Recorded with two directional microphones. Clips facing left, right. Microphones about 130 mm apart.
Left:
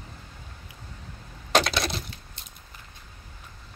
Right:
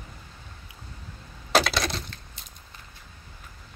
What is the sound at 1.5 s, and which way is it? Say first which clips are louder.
Coin: even; centre (ahead or behind).